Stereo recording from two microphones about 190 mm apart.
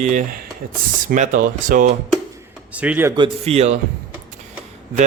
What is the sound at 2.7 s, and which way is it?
Speech, 5° right (ahead or behind).